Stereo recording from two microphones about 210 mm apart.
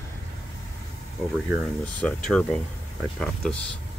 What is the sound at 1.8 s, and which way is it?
Speech, 5° left (ahead or behind).